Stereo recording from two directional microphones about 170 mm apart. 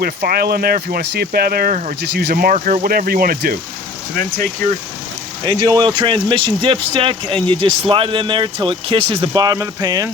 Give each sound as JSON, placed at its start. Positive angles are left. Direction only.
{"t": 0.0, "sound": "speech", "side_deg": -65}
{"t": 5.5, "sound": "speech", "side_deg": -20}